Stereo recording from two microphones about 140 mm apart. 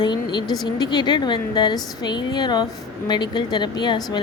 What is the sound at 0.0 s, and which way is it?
Speech, 35° left (ahead or behind).